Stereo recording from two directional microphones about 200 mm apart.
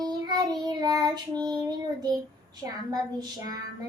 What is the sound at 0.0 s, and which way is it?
Child singing, 20° right (ahead or behind).